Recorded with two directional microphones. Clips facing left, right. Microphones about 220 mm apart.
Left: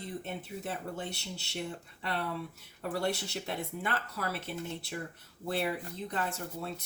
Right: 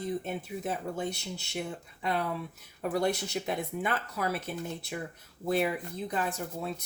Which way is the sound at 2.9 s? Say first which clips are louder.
Right 4 dB; 15° right (ahead or behind).